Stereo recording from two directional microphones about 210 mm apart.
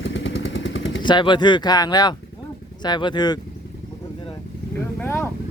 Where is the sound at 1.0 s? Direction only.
20° left (ahead or behind).